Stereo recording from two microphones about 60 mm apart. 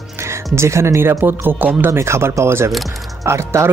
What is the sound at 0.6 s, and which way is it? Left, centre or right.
Speech, right.